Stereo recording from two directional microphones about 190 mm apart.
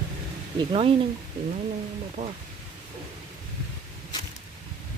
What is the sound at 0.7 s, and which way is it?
Speech, 30° right (ahead or behind).